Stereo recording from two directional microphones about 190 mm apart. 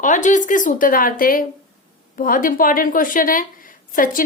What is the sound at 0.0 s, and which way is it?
A woman's voice, 40° left (ahead or behind).